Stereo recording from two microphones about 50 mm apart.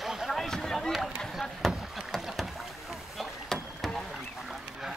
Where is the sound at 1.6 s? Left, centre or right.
Centre.